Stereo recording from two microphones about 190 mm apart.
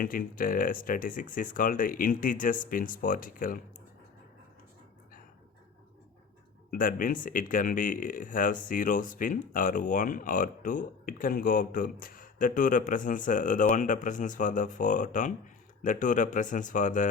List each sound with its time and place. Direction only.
0.0 s speech: 45° left (ahead or behind)
6.7 s speech: 45° left (ahead or behind)